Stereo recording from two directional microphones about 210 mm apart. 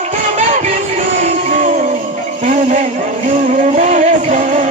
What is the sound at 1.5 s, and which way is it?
Music, 35° right (ahead or behind).